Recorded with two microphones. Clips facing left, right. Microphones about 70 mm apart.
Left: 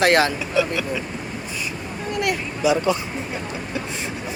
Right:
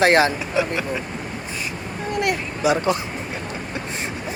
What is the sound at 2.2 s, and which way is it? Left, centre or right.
Speech, right.